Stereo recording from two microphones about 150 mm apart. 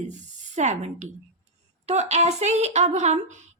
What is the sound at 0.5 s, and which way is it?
A woman's voice, 50° right (ahead or behind).